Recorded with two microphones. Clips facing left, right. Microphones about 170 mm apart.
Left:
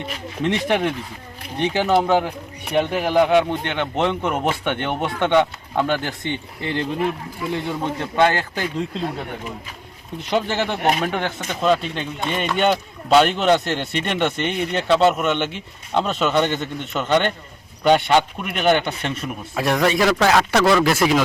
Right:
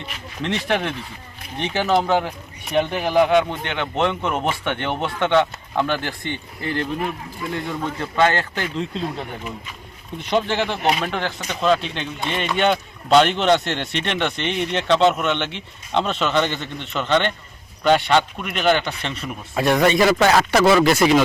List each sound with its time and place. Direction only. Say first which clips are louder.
0.4 s speech: left 3 dB; 15° left (ahead or behind)
10.2 s speech: right 1 dB; 10° left (ahead or behind)
19.2 s speech: right 3 dB; 5° left (ahead or behind)